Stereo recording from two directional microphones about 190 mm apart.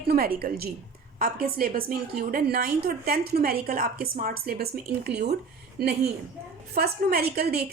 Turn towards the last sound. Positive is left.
turn(degrees=-55)  # may be behind; listen again after turning